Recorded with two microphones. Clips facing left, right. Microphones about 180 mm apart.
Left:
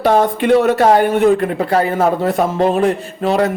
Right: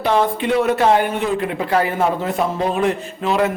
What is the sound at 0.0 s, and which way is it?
Speech, 45° left (ahead or behind).